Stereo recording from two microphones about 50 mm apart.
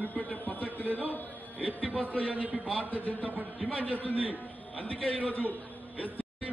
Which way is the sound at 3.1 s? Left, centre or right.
Right.